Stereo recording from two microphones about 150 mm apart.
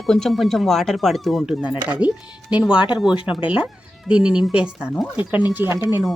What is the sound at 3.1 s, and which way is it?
Speech, 35° left (ahead or behind).